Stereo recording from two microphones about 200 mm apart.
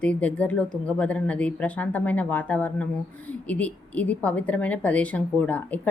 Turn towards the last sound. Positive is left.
turn(degrees=5)  # may be behind; listen again after turning